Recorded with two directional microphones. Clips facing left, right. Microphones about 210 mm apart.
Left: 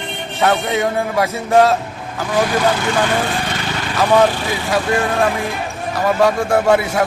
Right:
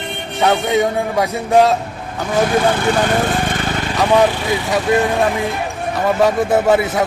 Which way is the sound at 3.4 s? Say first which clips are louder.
Right 3 dB; 50° right (ahead or behind).